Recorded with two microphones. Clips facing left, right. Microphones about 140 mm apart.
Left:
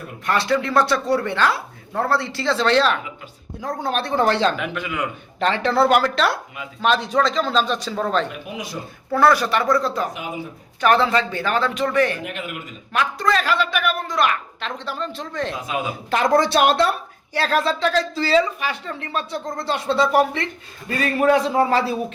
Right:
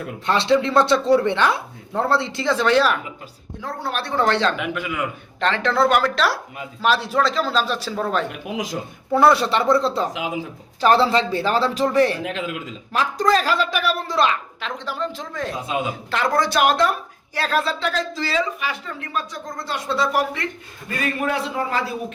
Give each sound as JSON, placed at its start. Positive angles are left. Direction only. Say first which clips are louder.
{"t": 0.3, "sound": "speech", "louder": "right 2 dB", "side_deg": -25}
{"t": 3.8, "sound": "speech", "louder": "left 2 dB", "side_deg": 20}
{"t": 4.5, "sound": "speech", "louder": "right 1 dB", "side_deg": -10}
{"t": 5.4, "sound": "speech", "louder": "left 1 dB", "side_deg": 5}
{"t": 8.3, "sound": "speech", "louder": "right 4 dB", "side_deg": -90}
{"t": 9.1, "sound": "speech", "louder": "right 1 dB", "side_deg": -25}
{"t": 10.1, "sound": "speech", "louder": "right 3 dB", "side_deg": -90}
{"t": 10.8, "sound": "a woman's voice", "louder": "right 1 dB", "side_deg": -30}
{"t": 14.6, "sound": "speech", "louder": "right 1 dB", "side_deg": -15}
{"t": 15.6, "sound": "speech", "louder": "right 1 dB", "side_deg": -25}
{"t": 16.0, "sound": "speech", "louder": "left 5 dB", "side_deg": 20}
{"t": 21.0, "sound": "speech", "louder": "left 6 dB", "side_deg": 40}